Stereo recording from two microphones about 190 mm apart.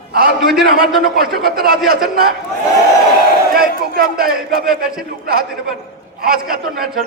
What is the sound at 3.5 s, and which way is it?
Speech, 50° right (ahead or behind).